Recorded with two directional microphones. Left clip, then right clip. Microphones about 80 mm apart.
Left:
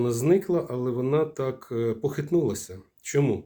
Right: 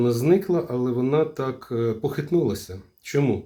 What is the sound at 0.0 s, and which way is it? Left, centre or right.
Speech, left.